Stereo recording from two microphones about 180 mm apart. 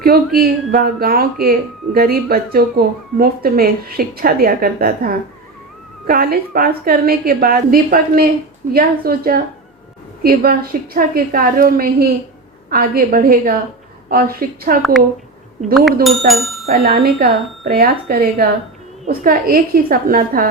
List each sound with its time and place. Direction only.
0.3 s a woman's voice: 55° right (ahead or behind)
15.7 s speech: centre (ahead or behind)
16.7 s a woman's voice: 60° right (ahead or behind)